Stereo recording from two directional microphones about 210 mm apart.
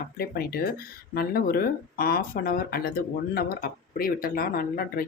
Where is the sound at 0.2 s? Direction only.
45° left (ahead or behind).